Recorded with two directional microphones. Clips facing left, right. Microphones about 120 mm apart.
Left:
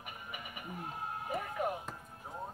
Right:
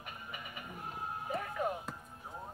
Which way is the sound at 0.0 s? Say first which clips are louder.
Even; 15° left (ahead or behind).